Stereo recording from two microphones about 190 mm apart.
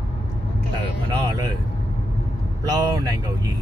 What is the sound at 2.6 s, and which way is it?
Vehicle, 20° right (ahead or behind).